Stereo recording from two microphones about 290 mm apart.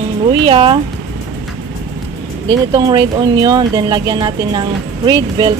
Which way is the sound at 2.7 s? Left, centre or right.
Centre.